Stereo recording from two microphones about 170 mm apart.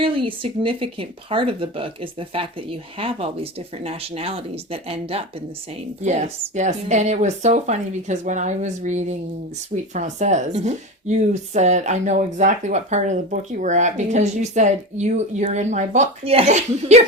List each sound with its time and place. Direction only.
0.0 s a woman's voice: 30° right (ahead or behind)